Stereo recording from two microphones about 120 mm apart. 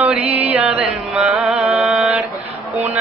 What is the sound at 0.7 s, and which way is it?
Mantra, 10° right (ahead or behind).